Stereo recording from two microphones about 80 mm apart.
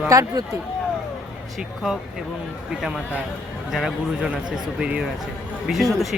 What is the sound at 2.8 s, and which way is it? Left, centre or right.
Speech, centre.